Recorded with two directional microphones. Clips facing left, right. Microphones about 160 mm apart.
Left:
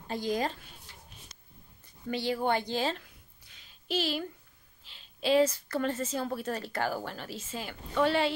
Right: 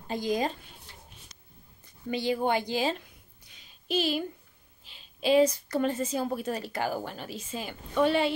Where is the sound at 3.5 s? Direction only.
15° right (ahead or behind).